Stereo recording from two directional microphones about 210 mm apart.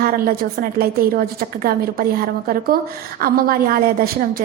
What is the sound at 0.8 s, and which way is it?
A woman's voice, 45° right (ahead or behind).